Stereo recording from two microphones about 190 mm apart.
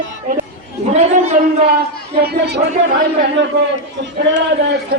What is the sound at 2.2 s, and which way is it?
Speech, 60° right (ahead or behind).